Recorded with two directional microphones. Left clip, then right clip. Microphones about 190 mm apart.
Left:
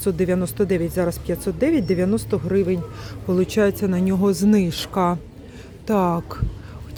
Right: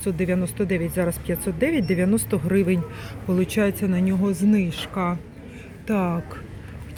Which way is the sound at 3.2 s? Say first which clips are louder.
Left 4 dB; 20° left (ahead or behind).